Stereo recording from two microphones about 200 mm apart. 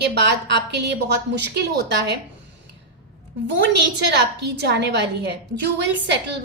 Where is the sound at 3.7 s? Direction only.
60° right (ahead or behind).